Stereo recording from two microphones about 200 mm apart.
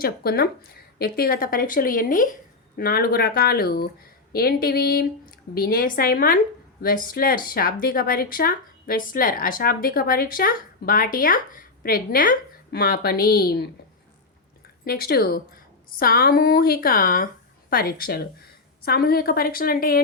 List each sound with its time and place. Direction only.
0.0 s speech: 50° left (ahead or behind)
14.8 s speech: 50° left (ahead or behind)